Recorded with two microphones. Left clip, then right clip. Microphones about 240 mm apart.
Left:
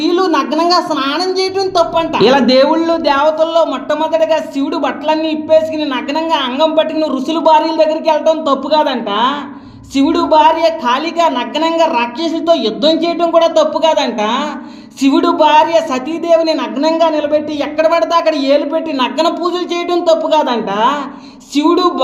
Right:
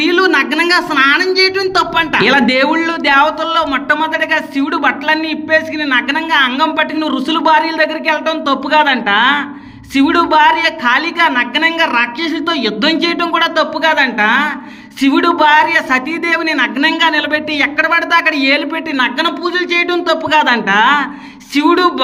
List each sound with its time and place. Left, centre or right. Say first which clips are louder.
0.0 s a sound: right 2 dB; right
0.3 s a sound: right 1 dB; right
1.3 s speech: right 3 dB; centre
2.1 s a man's voice: left 2 dB; right
9.0 s a woman's voice: right 3 dB; right
13.6 s a man's voice: left 1 dB; right
19.7 s speech: left 2 dB; right
20.4 s a woman's voice: right 3 dB; right